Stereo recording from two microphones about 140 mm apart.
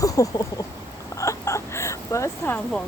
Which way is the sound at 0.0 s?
25° left (ahead or behind).